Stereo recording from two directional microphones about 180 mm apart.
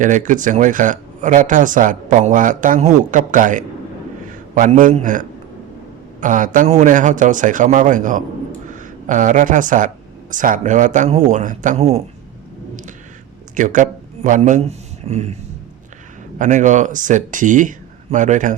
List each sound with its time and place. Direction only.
0.0 s a man's voice: 45° right (ahead or behind)
13.6 s speech: 45° right (ahead or behind)
16.4 s speech: 45° right (ahead or behind)